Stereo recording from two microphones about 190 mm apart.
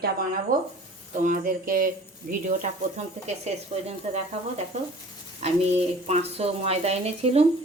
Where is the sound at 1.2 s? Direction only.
50° right (ahead or behind).